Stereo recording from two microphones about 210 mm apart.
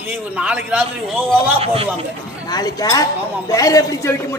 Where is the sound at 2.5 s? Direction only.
20° left (ahead or behind).